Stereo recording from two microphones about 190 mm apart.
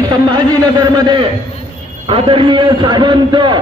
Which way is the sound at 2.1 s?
25° right (ahead or behind).